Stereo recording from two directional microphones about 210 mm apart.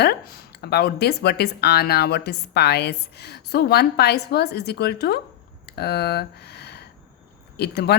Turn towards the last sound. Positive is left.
turn(degrees=50)  # may be behind; listen again after turning